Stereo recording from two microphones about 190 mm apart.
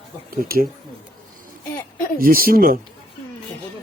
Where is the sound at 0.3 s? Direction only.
50° right (ahead or behind).